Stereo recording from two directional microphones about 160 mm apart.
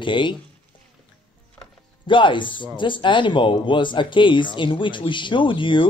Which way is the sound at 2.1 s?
30° left (ahead or behind).